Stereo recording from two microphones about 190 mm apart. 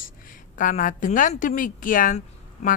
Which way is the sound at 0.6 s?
45° left (ahead or behind).